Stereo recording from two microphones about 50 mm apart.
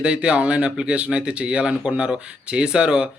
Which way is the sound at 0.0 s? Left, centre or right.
Centre.